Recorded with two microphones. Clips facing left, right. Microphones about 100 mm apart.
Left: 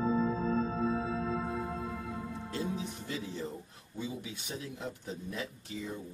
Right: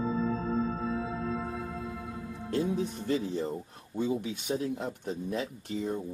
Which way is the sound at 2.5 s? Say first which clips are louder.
Right 8 dB; 55° right (ahead or behind).